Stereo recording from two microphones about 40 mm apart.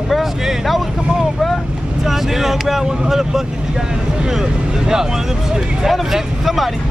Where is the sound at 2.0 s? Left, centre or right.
Centre.